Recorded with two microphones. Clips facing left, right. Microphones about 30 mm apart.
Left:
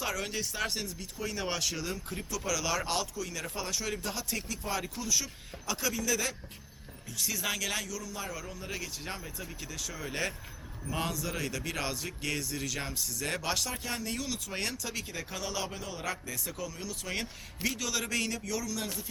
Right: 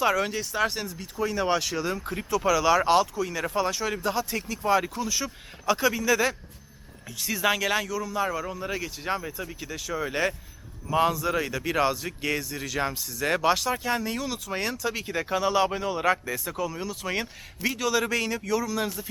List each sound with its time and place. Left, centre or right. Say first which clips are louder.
0.0 s a man's voice: right 11 dB; right
0.3 s a man's voice: right 7 dB; centre